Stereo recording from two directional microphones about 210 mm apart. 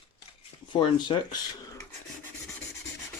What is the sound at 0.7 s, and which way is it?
Speech, 20° left (ahead or behind).